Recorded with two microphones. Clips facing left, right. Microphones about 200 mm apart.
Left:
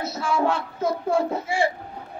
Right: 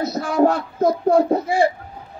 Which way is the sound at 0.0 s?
40° right (ahead or behind).